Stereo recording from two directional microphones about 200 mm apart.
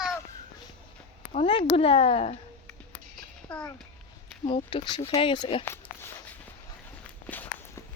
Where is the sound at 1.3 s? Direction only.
30° left (ahead or behind).